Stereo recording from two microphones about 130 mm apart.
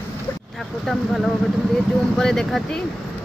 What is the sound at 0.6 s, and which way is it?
Speech, centre (ahead or behind).